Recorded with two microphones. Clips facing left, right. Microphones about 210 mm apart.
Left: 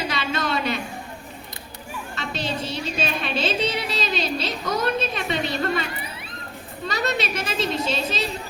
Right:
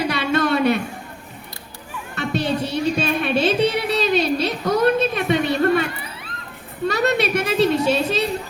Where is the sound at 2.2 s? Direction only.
60° right (ahead or behind).